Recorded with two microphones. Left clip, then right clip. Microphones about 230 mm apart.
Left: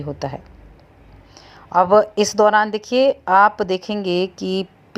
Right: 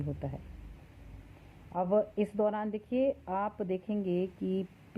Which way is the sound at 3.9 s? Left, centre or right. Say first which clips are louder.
Left 13 dB; left.